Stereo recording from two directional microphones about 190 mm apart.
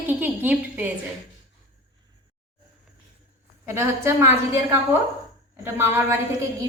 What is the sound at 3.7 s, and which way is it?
Speech, 15° right (ahead or behind).